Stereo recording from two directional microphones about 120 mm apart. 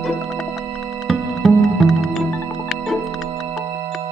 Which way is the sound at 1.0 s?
Centre (ahead or behind).